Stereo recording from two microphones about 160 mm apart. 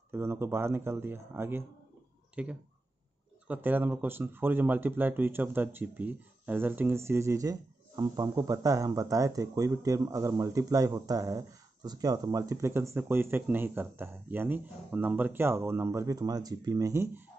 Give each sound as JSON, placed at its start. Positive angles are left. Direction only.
{"t": 0.1, "sound": "speech", "side_deg": -15}